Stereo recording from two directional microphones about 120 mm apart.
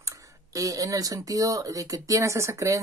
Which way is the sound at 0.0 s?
25° right (ahead or behind).